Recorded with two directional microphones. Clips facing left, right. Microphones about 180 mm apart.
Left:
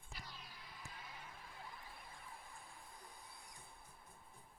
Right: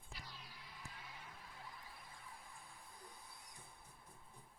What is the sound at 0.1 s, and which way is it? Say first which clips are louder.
Music: left 1 dB; 50° left (ahead or behind).